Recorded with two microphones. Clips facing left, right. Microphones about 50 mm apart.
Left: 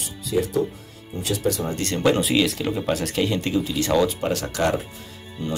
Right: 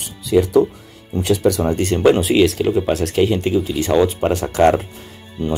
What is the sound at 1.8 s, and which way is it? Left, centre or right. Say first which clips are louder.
Speech: right 6 dB; centre.